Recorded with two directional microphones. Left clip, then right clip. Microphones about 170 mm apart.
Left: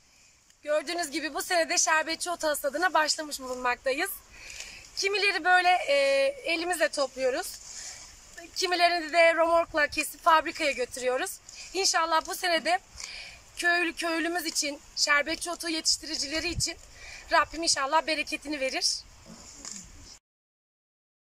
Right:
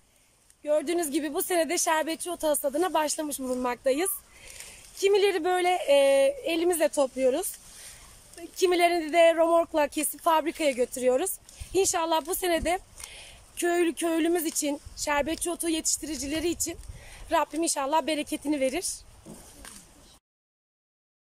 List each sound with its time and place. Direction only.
0.7 s speech: 45° right (ahead or behind)
8.5 s speech: 45° right (ahead or behind)